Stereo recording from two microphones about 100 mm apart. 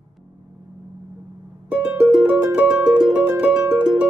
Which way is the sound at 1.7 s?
15° right (ahead or behind).